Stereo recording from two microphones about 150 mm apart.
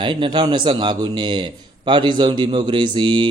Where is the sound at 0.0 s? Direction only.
30° right (ahead or behind).